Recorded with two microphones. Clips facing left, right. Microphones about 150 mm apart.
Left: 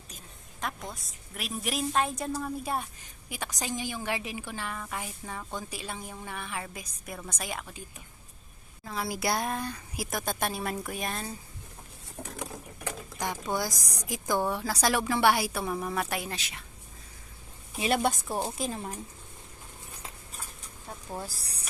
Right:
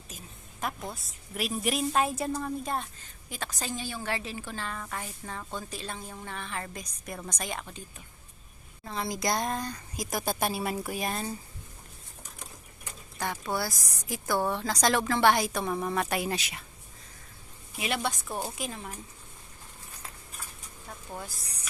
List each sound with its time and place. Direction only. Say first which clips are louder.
0.1 s a woman's voice: right 5 dB; 5° right (ahead or behind)
8.8 s a woman's voice: even; centre (ahead or behind)
10.2 s a woman's voice: right 2 dB; 5° right (ahead or behind)
12.2 s patter: left 11 dB; 65° left (ahead or behind)
13.1 s a woman's voice: even; 15° left (ahead or behind); by 16.6 s 10° right (ahead or behind)
17.7 s a woman's voice: left 5 dB; 40° left (ahead or behind)
18.3 s a woman's voice: left 3 dB; 30° left (ahead or behind)